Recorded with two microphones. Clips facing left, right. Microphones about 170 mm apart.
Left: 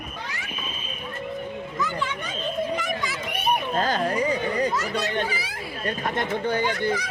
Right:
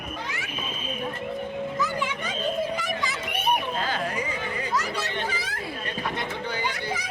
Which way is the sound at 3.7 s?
45° left (ahead or behind).